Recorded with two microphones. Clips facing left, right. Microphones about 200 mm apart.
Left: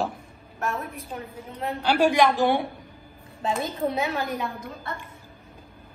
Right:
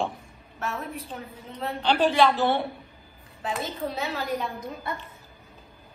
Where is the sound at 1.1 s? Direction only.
10° left (ahead or behind).